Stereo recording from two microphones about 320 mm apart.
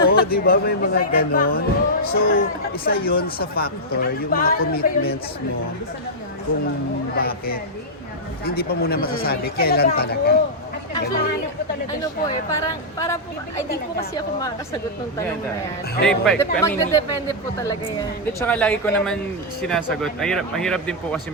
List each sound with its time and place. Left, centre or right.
0.1 s speech: left
7.2 s speech: left
12.5 s speech: centre
16.0 s speech: centre
18.4 s speech: centre